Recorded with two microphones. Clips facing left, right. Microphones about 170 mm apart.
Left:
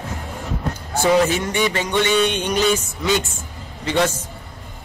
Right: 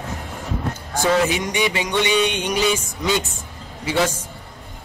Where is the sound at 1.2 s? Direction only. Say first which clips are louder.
Left 1 dB; 15° right (ahead or behind).